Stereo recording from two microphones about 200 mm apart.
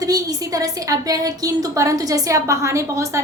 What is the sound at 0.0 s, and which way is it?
A woman's voice, 20° right (ahead or behind).